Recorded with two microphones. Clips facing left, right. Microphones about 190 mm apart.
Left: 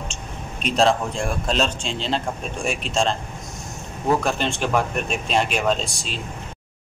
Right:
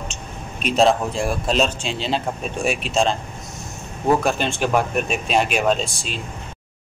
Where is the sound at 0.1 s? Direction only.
5° right (ahead or behind).